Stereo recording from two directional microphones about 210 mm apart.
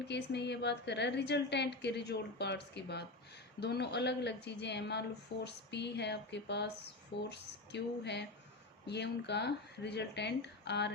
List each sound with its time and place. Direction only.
0.1 s a woman's voice: 55° left (ahead or behind)